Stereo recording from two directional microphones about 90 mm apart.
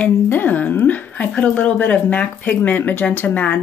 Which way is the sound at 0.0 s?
20° left (ahead or behind).